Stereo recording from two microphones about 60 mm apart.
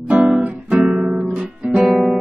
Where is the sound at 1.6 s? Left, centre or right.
Centre.